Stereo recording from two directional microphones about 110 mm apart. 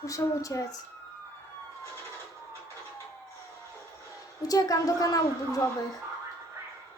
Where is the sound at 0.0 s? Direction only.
30° left (ahead or behind).